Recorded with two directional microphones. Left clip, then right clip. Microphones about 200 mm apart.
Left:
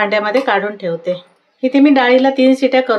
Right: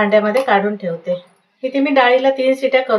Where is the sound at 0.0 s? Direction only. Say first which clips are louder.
Even; 55° left (ahead or behind).